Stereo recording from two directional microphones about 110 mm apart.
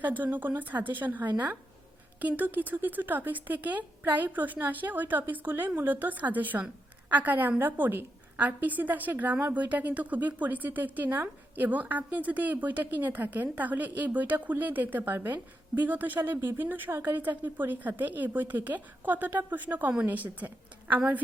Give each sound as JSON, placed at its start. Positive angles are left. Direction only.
{"t": 0.0, "sound": "a woman's voice", "side_deg": -15}